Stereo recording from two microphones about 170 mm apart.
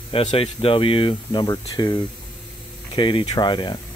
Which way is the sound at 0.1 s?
30° left (ahead or behind).